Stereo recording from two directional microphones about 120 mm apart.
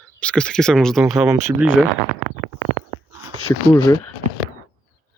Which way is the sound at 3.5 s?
30° left (ahead or behind).